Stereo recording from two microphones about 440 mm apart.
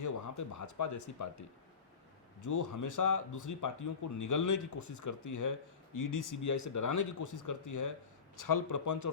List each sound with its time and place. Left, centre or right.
0.0 s speech: left